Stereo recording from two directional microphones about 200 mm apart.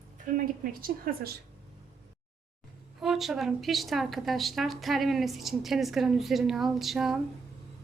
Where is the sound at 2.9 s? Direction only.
Centre (ahead or behind).